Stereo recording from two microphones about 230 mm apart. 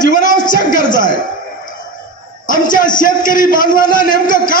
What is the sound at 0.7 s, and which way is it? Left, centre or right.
Speech, left.